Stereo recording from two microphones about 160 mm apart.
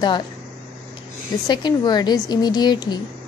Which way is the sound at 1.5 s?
25° left (ahead or behind).